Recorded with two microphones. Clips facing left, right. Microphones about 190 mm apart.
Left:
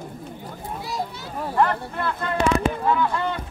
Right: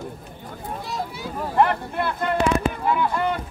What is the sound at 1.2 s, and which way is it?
Vehicle, 15° right (ahead or behind).